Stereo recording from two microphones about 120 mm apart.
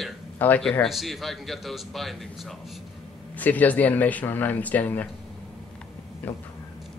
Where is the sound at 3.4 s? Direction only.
15° left (ahead or behind).